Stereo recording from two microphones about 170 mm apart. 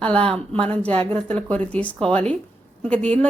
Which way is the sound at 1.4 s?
10° left (ahead or behind).